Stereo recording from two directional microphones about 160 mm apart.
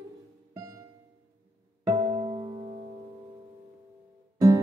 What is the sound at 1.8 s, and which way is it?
Music, 25° right (ahead or behind).